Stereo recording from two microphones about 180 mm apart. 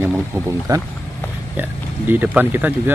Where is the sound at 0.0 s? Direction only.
15° right (ahead or behind).